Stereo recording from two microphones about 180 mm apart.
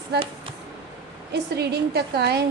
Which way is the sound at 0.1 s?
65° right (ahead or behind).